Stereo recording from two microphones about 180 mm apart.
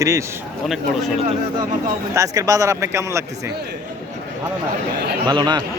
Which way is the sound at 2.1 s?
20° right (ahead or behind).